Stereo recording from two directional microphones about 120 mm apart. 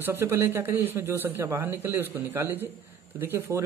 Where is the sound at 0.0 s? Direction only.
20° right (ahead or behind).